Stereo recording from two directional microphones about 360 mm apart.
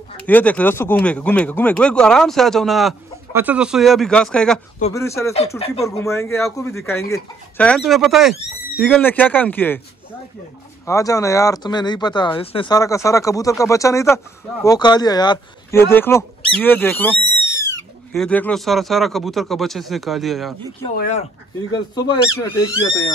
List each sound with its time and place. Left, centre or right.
0.2 s speech: centre
10.9 s speech: centre
20.9 s speech: left
21.7 s speech: centre